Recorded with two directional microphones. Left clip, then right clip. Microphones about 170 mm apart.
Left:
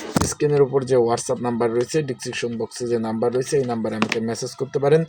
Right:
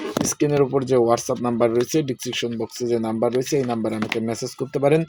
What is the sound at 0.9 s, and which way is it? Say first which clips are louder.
Speech: right 1 dB; 40° right (ahead or behind).